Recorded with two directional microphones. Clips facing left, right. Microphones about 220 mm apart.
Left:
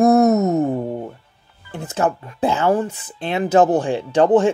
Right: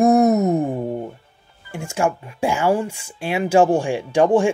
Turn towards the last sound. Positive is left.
turn(degrees=-10)  # may be behind; listen again after turning